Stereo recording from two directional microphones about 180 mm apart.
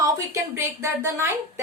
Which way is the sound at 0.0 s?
15° right (ahead or behind).